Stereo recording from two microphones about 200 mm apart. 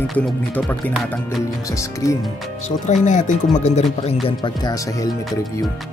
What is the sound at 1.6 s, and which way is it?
Speech, 15° left (ahead or behind).